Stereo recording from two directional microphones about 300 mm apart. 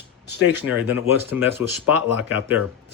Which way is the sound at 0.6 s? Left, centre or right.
Centre.